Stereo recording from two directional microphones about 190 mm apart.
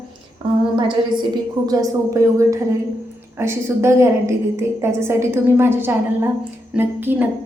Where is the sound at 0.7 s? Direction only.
25° right (ahead or behind).